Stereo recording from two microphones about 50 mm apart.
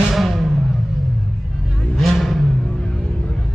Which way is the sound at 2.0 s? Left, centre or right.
Centre.